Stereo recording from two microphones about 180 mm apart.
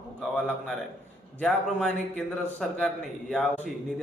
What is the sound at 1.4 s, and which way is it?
Speech, 5° left (ahead or behind).